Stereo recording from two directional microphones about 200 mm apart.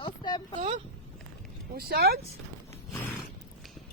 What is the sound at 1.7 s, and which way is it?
Speech, 50° right (ahead or behind).